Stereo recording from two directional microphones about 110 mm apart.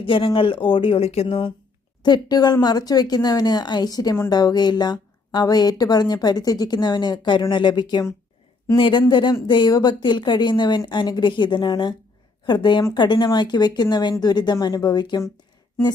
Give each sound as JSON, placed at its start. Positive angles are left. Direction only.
{"t": 0.0, "sound": "speech", "side_deg": 50}
{"t": 2.0, "sound": "speech", "side_deg": 40}